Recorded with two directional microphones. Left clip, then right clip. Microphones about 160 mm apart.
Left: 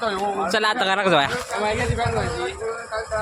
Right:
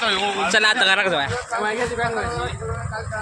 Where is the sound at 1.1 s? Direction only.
75° left (ahead or behind).